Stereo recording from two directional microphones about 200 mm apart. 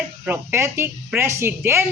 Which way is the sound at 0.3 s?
10° right (ahead or behind).